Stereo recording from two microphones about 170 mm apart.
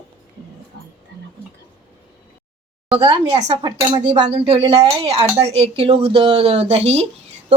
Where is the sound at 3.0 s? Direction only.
30° right (ahead or behind).